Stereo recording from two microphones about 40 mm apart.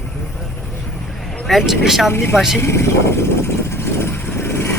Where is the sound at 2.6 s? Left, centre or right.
Left.